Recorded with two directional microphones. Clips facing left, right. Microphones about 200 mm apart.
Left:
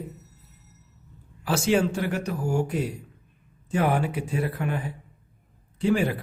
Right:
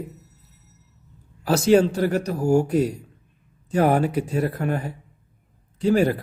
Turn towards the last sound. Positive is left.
turn(degrees=-40)  # may be behind; listen again after turning